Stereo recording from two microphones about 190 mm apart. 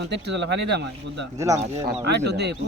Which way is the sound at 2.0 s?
65° right (ahead or behind).